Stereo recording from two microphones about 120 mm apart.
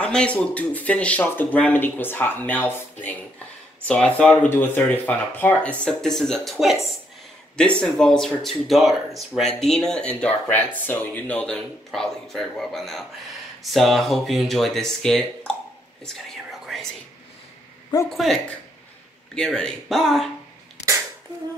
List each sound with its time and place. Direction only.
0.0 s speech: 10° left (ahead or behind)
16.0 s whispering: centre (ahead or behind)
18.1 s speech: centre (ahead or behind)